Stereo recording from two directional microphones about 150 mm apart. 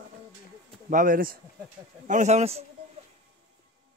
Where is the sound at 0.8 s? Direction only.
65° right (ahead or behind).